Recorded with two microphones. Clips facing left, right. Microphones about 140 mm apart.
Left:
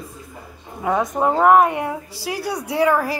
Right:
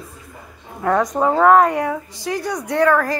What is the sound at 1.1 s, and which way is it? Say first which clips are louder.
A woman's voice: right 1 dB; 15° left (ahead or behind).